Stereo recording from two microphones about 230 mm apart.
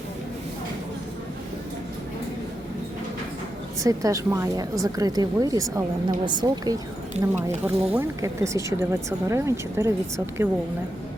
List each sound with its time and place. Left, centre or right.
3.8 s speech: centre